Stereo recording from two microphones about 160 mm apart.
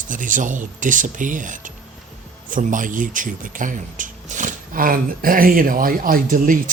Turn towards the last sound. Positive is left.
turn(degrees=-60)  # may be behind; listen again after turning